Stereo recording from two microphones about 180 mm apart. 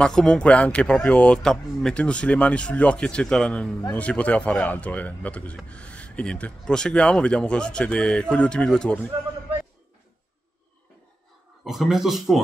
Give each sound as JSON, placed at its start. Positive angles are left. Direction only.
{"t": 0.0, "sound": "speech", "side_deg": 5}
{"t": 11.6, "sound": "speech", "side_deg": 0}